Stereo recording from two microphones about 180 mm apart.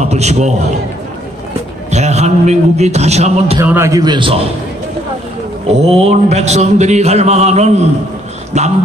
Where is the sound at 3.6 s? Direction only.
15° right (ahead or behind).